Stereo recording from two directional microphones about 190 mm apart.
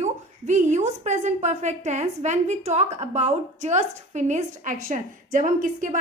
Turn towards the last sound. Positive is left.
turn(degrees=-45)  # may be behind; listen again after turning